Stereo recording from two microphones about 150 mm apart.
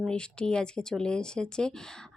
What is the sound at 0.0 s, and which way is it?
Speech, 5° left (ahead or behind).